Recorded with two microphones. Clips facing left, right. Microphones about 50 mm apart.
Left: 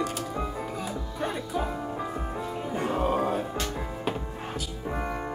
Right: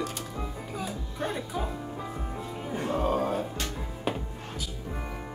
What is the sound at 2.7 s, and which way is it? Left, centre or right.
Music, centre.